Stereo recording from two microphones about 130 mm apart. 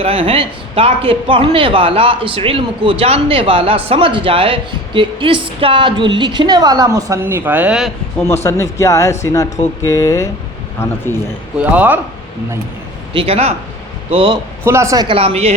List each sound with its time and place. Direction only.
0.0 s a man's voice: 45° right (ahead or behind); by 7.9 s 5° right (ahead or behind)
8.4 s speech: 25° left (ahead or behind)
11.6 s speech: 10° right (ahead or behind)
13.1 s a man's voice: 50° right (ahead or behind)
14.6 s speech: 20° right (ahead or behind)
15.0 s a man's voice: 45° right (ahead or behind)